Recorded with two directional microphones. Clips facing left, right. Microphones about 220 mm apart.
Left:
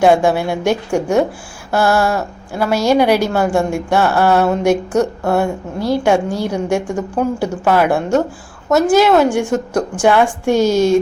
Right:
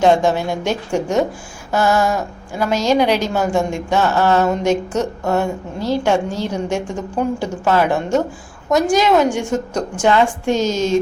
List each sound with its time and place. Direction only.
0.0 s a woman's voice: 10° left (ahead or behind)